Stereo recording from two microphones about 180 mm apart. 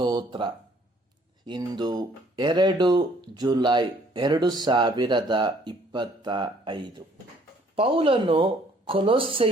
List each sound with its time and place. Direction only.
0.0 s speech: 25° right (ahead or behind)